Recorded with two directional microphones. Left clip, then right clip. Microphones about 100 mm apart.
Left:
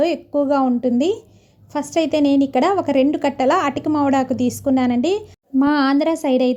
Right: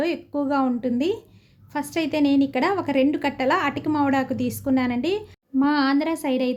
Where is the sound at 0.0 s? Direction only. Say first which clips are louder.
Left 7 dB; 25° left (ahead or behind).